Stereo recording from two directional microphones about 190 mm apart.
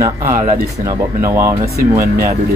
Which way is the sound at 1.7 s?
50° right (ahead or behind).